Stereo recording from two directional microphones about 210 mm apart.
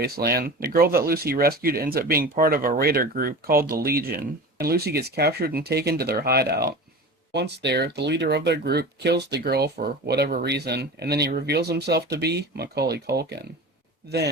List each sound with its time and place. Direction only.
0.0 s speech: 50° right (ahead or behind)